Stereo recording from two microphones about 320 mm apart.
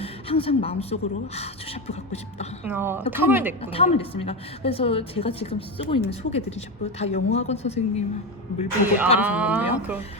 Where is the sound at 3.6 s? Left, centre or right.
Centre.